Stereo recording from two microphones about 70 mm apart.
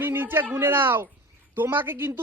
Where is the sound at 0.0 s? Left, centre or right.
Right.